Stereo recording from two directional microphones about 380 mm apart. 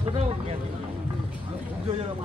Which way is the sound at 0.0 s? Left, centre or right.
Centre.